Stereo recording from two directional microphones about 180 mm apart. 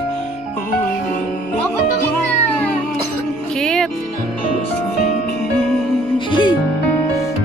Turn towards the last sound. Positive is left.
turn(degrees=25)  # may be behind; listen again after turning